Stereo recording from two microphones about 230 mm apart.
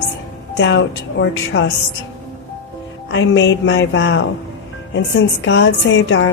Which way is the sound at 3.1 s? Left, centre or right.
Left.